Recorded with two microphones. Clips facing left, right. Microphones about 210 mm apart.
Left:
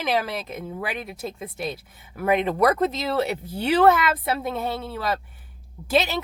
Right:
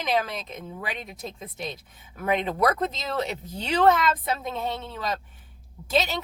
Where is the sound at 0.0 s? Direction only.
Centre (ahead or behind).